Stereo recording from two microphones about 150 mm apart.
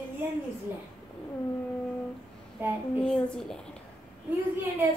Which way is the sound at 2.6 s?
15° right (ahead or behind).